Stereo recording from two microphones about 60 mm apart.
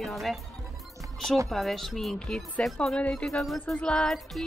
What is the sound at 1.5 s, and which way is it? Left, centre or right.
Speech, centre.